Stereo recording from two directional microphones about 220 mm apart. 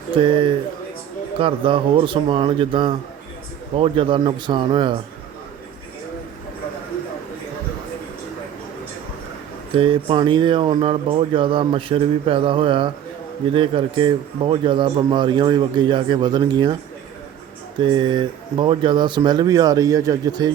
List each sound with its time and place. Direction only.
0.1 s a man's voice: 25° right (ahead or behind)
9.7 s a man's voice: 25° right (ahead or behind)
17.7 s a man's voice: 20° right (ahead or behind)